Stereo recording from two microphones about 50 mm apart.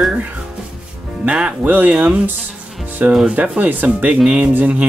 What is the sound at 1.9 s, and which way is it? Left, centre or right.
Speech, right.